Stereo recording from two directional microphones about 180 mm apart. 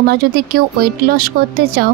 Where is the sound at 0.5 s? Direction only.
60° right (ahead or behind).